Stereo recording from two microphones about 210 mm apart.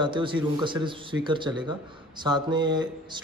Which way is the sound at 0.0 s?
25° right (ahead or behind).